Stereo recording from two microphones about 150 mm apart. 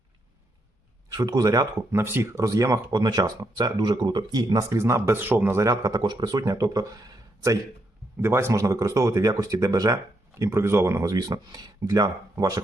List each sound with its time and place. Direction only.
1.1 s speech: 25° right (ahead or behind)